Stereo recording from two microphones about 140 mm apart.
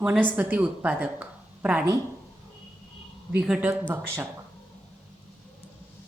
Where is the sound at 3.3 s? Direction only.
10° right (ahead or behind).